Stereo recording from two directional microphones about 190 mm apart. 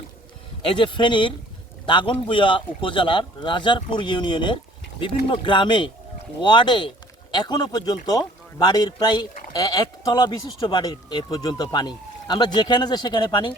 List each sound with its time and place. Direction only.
0.8 s speech: 25° left (ahead or behind)